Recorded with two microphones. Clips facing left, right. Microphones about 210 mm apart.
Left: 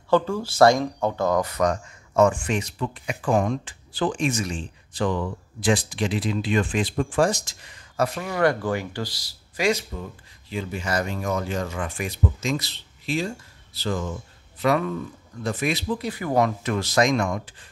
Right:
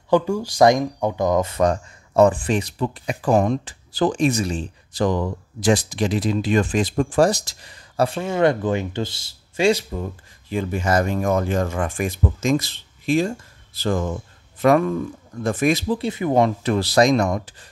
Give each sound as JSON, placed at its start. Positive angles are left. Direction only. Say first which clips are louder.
{"t": 0.1, "sound": "speech", "louder": "right 3 dB", "side_deg": -15}
{"t": 10.5, "sound": "speech", "louder": "right 6 dB", "side_deg": -50}
{"t": 16.0, "sound": "speech", "louder": "right 4 dB", "side_deg": -25}